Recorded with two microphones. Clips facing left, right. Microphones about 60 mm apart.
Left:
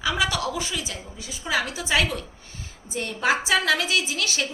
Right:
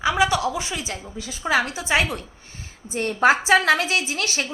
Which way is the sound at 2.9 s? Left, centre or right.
Right.